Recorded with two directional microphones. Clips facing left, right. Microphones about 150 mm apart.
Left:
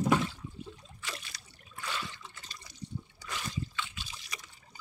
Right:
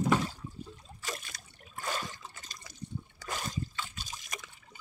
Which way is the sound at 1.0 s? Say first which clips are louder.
Right 3 dB; 45° right (ahead or behind).